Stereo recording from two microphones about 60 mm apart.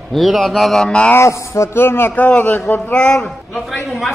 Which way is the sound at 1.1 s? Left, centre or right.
Left.